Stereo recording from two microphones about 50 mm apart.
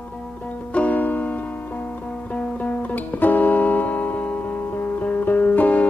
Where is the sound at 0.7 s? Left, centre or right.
Left.